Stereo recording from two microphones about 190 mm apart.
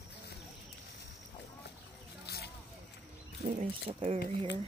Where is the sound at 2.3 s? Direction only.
55° left (ahead or behind).